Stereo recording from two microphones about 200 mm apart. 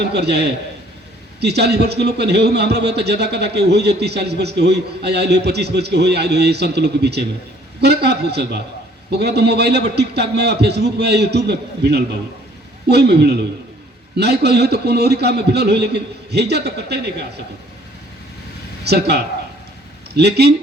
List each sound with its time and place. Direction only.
0.0 s a man's voice: 55° right (ahead or behind)
18.9 s a man's voice: 55° right (ahead or behind)